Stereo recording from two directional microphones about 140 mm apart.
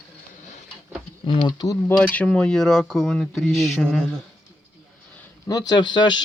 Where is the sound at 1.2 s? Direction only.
40° left (ahead or behind).